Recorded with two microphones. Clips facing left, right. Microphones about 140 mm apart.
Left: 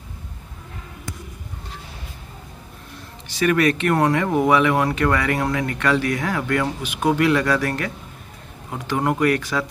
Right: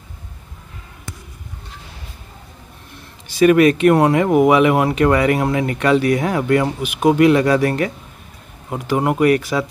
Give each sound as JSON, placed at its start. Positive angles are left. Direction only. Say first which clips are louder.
{"t": 3.3, "sound": "speech", "louder": "right 7 dB", "side_deg": -15}
{"t": 8.7, "sound": "speech", "louder": "right 4 dB", "side_deg": -10}